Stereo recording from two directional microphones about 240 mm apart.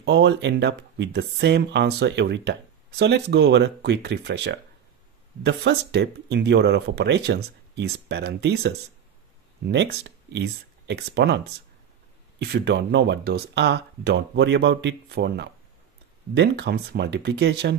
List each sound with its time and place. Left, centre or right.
0.0 s speech: right